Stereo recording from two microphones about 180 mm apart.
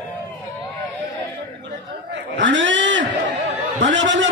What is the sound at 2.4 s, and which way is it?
A man's voice, 90° right.